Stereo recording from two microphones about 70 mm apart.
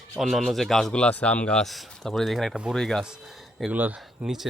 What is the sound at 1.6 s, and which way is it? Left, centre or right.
Speech, centre.